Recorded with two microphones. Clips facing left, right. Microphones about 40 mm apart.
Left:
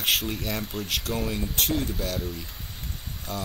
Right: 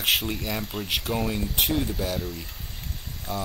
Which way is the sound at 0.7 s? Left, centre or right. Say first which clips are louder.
Right 1 dB; centre.